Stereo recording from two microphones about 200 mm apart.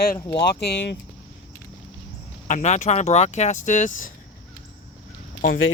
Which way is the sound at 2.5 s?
35° left (ahead or behind).